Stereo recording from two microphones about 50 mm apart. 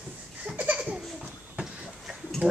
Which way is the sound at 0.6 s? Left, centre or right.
Right.